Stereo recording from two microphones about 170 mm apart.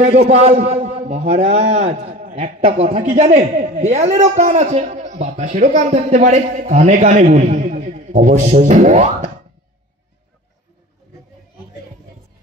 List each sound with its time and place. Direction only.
0.0 s a man's voice: 40° right (ahead or behind)